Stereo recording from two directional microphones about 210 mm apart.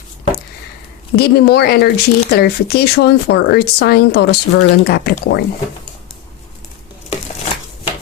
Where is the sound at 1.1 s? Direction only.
50° left (ahead or behind).